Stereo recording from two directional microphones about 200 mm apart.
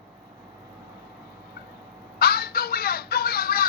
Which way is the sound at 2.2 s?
50° left (ahead or behind).